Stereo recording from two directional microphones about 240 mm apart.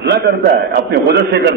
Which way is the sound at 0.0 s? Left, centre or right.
Right.